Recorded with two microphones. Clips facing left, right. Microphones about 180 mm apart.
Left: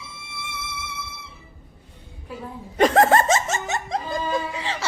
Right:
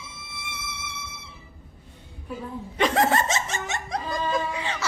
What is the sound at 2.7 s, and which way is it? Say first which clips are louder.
Laughter: left 5 dB; 50° left (ahead or behind).